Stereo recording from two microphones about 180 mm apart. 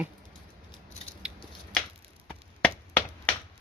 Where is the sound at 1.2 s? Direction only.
5° left (ahead or behind).